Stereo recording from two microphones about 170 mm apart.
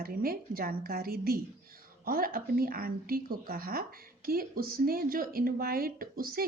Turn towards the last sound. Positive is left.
turn(degrees=-60)  # may be behind; listen again after turning